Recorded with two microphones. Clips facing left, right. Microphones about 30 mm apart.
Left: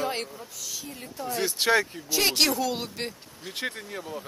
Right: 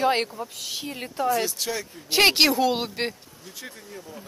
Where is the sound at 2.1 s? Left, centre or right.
Right.